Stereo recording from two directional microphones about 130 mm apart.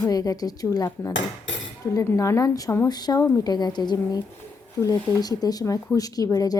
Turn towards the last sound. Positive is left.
turn(degrees=25)  # may be behind; listen again after turning